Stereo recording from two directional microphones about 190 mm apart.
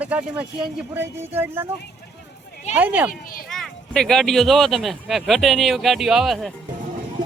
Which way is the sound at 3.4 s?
Centre (ahead or behind).